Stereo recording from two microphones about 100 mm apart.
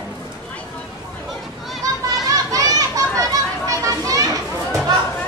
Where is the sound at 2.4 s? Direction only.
35° right (ahead or behind).